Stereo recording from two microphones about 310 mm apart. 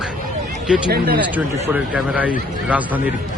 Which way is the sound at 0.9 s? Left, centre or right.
Right.